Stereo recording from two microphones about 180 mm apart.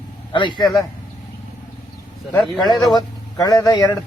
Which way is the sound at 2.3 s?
Centre (ahead or behind).